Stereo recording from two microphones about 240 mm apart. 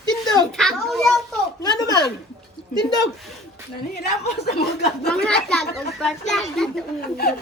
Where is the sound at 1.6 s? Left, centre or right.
Centre.